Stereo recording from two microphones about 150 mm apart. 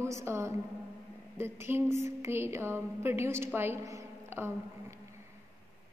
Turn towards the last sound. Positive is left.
turn(degrees=-15)  # may be behind; listen again after turning